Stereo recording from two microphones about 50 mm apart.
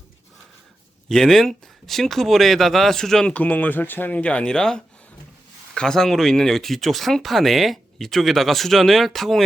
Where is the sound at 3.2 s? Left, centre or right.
Left.